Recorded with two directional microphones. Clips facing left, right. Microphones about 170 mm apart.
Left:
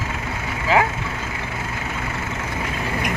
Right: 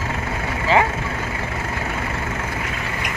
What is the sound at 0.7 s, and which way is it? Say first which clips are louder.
Speech: right 1 dB; 5° left (ahead or behind).